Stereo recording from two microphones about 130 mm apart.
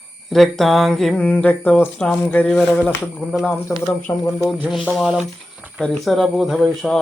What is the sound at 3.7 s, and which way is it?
Speech, 20° left (ahead or behind).